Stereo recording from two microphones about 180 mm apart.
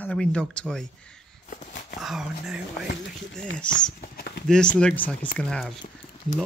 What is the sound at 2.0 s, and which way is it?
Speech, centre (ahead or behind).